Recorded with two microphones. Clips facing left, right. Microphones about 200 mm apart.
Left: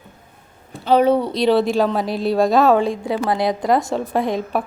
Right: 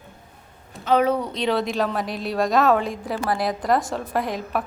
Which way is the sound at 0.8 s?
30° left (ahead or behind).